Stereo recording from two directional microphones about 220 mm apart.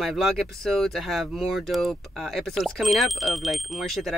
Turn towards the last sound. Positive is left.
turn(degrees=0)  # may be behind; listen again after turning